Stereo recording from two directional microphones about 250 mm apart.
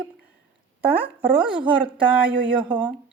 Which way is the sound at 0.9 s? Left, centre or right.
Centre.